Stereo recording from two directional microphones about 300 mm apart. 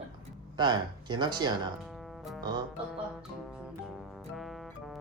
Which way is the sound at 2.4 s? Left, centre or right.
Centre.